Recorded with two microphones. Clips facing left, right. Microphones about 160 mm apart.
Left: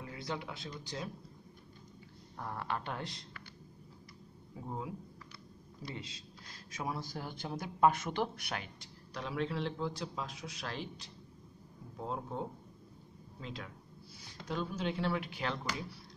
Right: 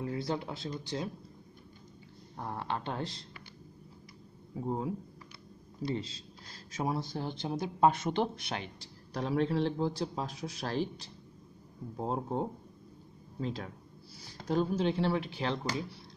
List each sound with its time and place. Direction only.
0.0 s speech: 35° right (ahead or behind)
2.3 s speech: 25° right (ahead or behind)
4.6 s speech: 30° right (ahead or behind)